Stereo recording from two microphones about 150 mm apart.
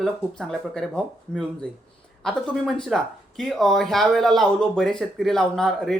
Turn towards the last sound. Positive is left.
turn(degrees=5)  # may be behind; listen again after turning